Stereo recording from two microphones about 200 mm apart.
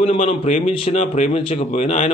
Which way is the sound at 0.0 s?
30° left (ahead or behind).